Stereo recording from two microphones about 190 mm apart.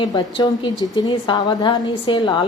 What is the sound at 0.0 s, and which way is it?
A woman's voice, 20° left (ahead or behind).